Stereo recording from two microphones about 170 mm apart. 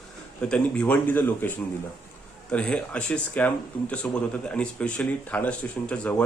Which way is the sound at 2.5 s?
5° left (ahead or behind).